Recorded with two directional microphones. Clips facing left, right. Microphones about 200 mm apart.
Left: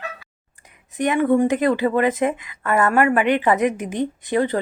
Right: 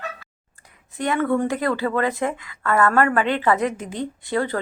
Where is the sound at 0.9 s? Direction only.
20° left (ahead or behind).